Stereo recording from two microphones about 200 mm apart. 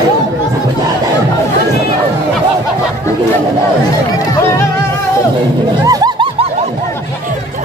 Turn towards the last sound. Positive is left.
turn(degrees=-20)  # may be behind; listen again after turning